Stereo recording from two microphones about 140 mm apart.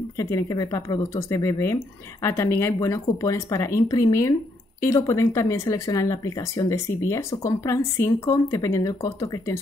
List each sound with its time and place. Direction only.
0.2 s speech: 25° left (ahead or behind)